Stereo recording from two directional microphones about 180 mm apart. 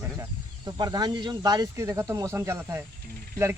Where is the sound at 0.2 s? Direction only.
20° right (ahead or behind).